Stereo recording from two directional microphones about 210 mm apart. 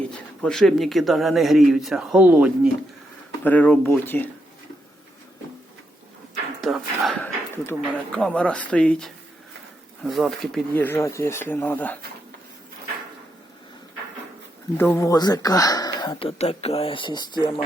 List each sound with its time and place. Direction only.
0.0 s speech: 5° left (ahead or behind)
3.4 s speech: 5° left (ahead or behind)
6.6 s a sound: centre (ahead or behind)
7.5 s speech: 10° left (ahead or behind)
14.8 s speech: 10° left (ahead or behind)